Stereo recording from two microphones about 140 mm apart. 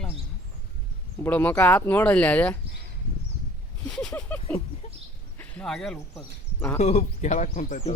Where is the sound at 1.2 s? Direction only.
15° left (ahead or behind).